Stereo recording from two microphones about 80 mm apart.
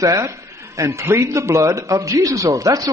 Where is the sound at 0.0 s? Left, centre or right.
Right.